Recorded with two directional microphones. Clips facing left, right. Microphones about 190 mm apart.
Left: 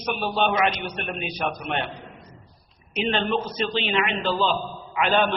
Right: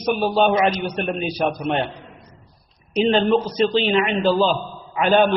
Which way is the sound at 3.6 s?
35° right (ahead or behind).